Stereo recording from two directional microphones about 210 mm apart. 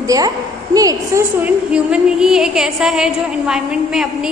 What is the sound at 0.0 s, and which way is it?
A woman's voice, 15° right (ahead or behind).